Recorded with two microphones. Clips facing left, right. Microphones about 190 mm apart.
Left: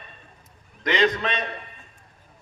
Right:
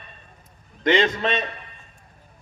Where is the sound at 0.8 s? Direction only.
25° right (ahead or behind).